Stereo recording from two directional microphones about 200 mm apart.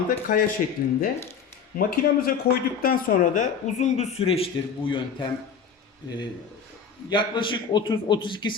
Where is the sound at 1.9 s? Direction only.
50° left (ahead or behind); by 5.3 s 25° left (ahead or behind).